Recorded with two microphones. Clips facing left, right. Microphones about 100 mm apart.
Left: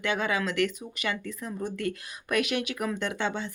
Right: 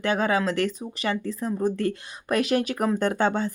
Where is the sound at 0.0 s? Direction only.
35° right (ahead or behind).